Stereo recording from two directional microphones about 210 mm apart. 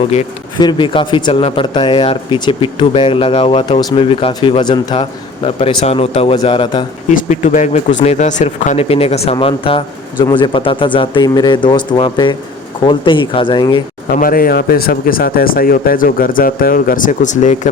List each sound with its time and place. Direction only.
0.0 s speech: 30° left (ahead or behind)
7.1 s speech: 35° left (ahead or behind); by 13.8 s 20° left (ahead or behind)
14.1 s speech: 45° left (ahead or behind)